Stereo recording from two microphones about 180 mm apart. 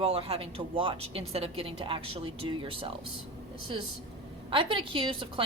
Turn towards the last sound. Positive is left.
turn(degrees=-30)  # may be behind; listen again after turning